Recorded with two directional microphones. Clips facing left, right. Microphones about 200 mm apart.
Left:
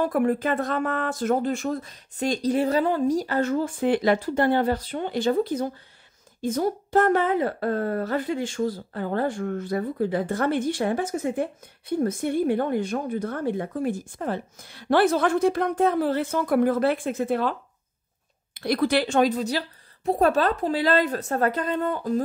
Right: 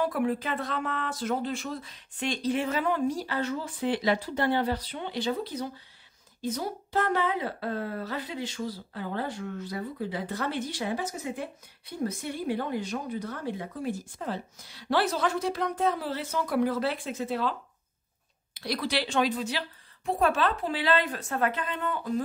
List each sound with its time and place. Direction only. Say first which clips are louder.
0.0 s speech: left 5 dB; 50° left (ahead or behind)